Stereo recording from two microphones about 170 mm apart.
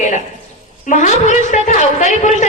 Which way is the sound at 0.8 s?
45° left (ahead or behind).